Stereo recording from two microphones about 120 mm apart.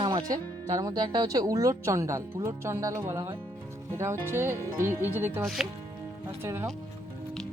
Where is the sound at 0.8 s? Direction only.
35° right (ahead or behind).